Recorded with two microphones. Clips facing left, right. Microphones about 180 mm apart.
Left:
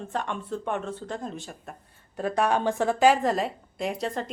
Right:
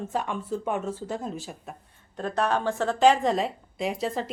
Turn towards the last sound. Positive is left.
turn(degrees=0)  # may be behind; listen again after turning